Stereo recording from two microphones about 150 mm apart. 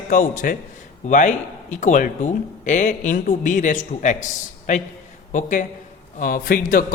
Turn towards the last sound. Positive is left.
turn(degrees=70)  # may be behind; listen again after turning